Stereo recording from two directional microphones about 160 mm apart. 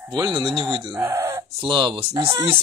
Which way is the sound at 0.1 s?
25° right (ahead or behind).